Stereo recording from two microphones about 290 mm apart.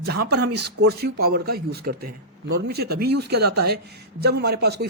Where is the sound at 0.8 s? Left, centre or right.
Right.